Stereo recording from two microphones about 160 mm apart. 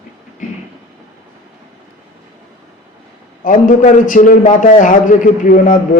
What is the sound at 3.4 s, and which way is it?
A man's voice, 55° left (ahead or behind).